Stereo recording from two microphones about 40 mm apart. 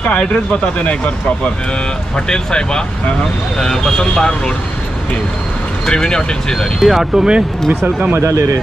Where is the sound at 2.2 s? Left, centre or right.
Centre.